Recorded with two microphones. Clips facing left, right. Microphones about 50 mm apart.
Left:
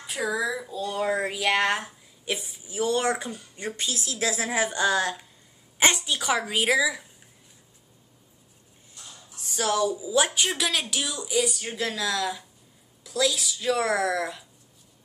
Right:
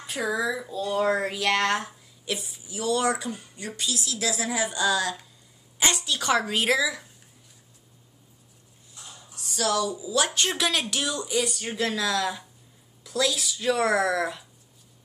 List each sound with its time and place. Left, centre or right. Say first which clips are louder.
0.0 s a sound: even; centre
0.5 s speech: right 2 dB; centre
2.2 s a woman's voice: left 1 dB; left
6.1 s a woman's voice: right 1 dB; centre
9.3 s a woman's voice: even; left
10.5 s speech: right 1 dB; centre